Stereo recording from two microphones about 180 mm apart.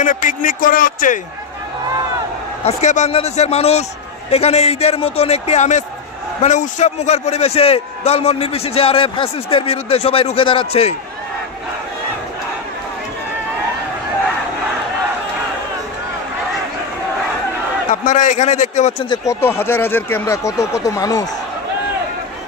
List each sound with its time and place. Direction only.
0.0 s speech: 45° left (ahead or behind)
2.6 s a man's voice: 40° left (ahead or behind)
18.0 s a man's voice: 45° left (ahead or behind)
19.0 s speech: 15° left (ahead or behind)